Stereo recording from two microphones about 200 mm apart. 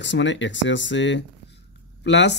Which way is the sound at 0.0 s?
65° left (ahead or behind).